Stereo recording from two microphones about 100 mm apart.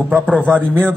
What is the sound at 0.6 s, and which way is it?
Speech, 15° left (ahead or behind).